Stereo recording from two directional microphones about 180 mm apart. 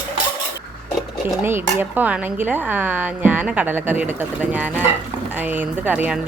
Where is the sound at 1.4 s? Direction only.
10° right (ahead or behind).